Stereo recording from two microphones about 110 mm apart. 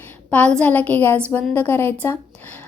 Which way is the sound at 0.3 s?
15° left (ahead or behind).